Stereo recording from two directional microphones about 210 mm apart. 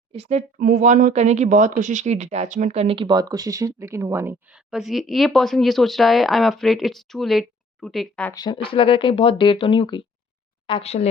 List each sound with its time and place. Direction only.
0.1 s speech: 30° right (ahead or behind); by 8.3 s centre (ahead or behind)
8.3 s speech: 20° left (ahead or behind)